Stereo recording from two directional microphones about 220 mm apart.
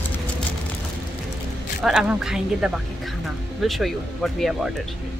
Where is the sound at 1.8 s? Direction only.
5° right (ahead or behind).